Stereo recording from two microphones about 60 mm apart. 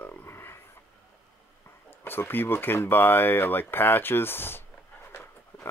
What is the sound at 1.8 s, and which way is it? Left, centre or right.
Speech, left.